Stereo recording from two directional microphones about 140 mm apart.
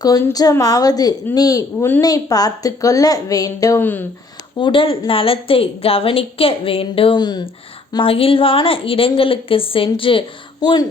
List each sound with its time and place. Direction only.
0.0 s a woman's voice: 25° left (ahead or behind)
4.5 s a woman's voice: 35° left (ahead or behind)
7.9 s a woman's voice: 40° left (ahead or behind)